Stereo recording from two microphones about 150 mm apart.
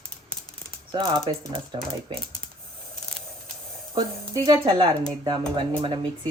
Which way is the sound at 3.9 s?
35° right (ahead or behind).